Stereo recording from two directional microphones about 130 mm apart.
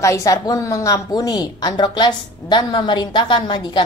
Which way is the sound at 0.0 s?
25° left (ahead or behind).